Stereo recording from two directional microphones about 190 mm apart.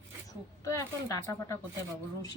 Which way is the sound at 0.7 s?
15° left (ahead or behind).